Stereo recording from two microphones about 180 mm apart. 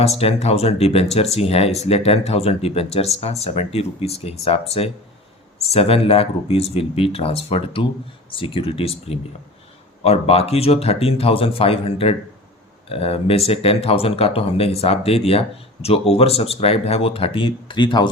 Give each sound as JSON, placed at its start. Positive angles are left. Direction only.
{"t": 0.0, "sound": "speech", "side_deg": 35}